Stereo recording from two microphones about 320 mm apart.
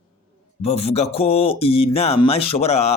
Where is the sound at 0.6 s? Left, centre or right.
Centre.